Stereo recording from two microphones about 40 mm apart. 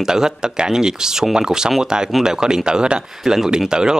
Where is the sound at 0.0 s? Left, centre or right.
Centre.